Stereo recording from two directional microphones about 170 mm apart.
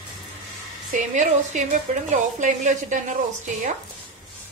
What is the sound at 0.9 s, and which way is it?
Speech, 45° right (ahead or behind).